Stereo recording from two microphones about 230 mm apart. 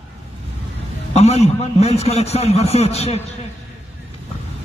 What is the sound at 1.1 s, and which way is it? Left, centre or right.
Speech, left.